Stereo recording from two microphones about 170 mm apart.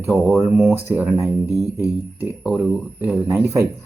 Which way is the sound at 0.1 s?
Centre (ahead or behind).